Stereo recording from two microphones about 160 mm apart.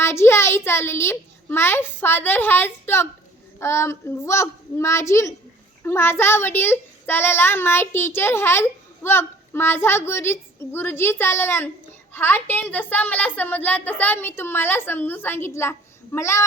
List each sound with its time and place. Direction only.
0.0 s a child's voice: 15° left (ahead or behind)